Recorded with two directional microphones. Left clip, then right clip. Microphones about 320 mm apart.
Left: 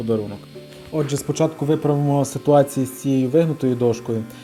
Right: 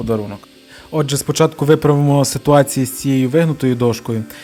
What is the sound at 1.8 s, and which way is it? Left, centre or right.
Speech, right.